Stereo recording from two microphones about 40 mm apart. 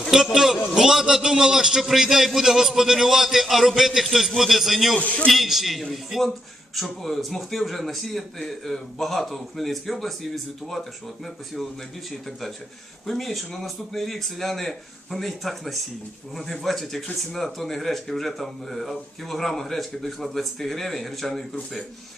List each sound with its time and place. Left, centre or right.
0.3 s a man's voice: centre
1.8 s a man's voice: centre
4.9 s a man's voice: left
5.3 s speech: centre
13.1 s speech: centre